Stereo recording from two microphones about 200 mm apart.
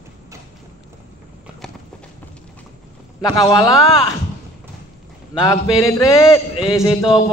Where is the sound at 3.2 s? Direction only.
20° left (ahead or behind).